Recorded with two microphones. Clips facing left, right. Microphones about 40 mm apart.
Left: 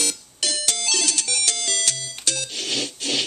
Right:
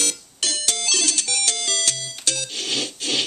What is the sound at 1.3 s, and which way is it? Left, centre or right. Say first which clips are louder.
Music: right 1 dB; centre.